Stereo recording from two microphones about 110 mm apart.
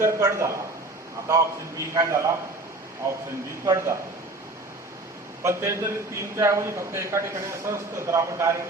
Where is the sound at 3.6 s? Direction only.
30° right (ahead or behind).